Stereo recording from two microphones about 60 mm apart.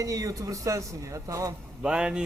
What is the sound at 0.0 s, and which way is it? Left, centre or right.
Speech, right.